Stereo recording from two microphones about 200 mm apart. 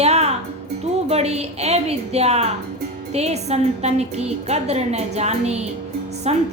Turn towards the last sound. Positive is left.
turn(degrees=-30)  # may be behind; listen again after turning